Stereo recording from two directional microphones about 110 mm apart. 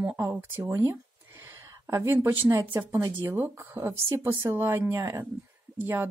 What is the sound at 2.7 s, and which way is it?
A woman's voice, 20° right (ahead or behind).